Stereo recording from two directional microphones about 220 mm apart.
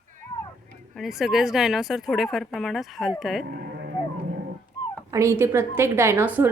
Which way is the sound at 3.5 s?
45° right (ahead or behind).